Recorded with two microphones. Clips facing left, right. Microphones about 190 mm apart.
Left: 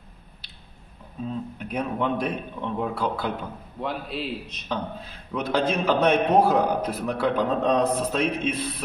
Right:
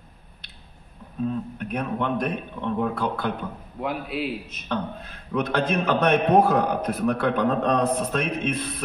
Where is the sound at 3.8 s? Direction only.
5° right (ahead or behind).